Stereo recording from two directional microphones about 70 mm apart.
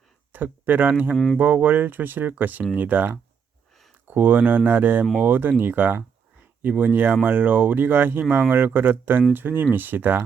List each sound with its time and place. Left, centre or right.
0.3 s speech: right
1.1 s speech: centre
1.4 s speech: right